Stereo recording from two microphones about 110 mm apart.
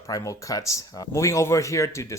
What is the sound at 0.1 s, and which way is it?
Speech, 30° left (ahead or behind).